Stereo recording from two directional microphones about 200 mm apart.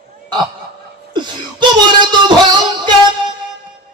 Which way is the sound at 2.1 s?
20° right (ahead or behind).